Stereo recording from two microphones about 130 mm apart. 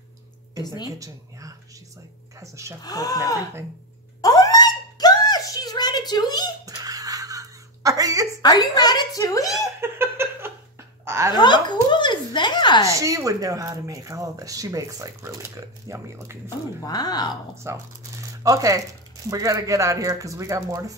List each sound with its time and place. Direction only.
0.6 s speech: 30° left (ahead or behind)
0.8 s speech: 25° right (ahead or behind)
2.8 s speech: 30° left (ahead or behind)
4.2 s a sound: 30° left (ahead or behind)
6.6 s a sound: 30° right (ahead or behind)
8.4 s a woman's voice: 30° left (ahead or behind)
9.8 s giggle: 20° right (ahead or behind)
11.1 s a sound: 20° right (ahead or behind)
11.3 s speech: 35° left (ahead or behind)
12.8 s speech: 25° right (ahead or behind)
16.4 s speech: 30° left (ahead or behind)
17.6 s speech: 25° right (ahead or behind)